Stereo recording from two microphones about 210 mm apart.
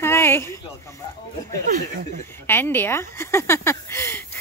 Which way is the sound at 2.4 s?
10° left (ahead or behind).